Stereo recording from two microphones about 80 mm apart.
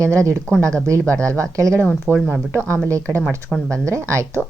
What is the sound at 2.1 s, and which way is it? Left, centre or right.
Speech, centre.